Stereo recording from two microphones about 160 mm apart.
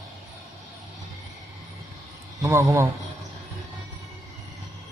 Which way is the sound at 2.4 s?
15° right (ahead or behind).